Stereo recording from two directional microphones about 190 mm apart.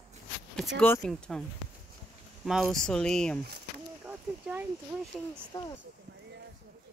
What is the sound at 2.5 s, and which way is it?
Speech, centre (ahead or behind).